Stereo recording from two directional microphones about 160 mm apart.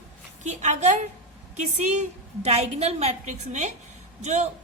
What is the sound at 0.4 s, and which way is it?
A woman's voice, 50° right (ahead or behind).